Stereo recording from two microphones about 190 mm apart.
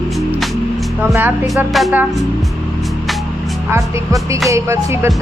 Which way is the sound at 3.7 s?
15° right (ahead or behind).